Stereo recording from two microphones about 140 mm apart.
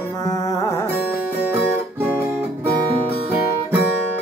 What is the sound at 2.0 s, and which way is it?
Guitar, 15° right (ahead or behind).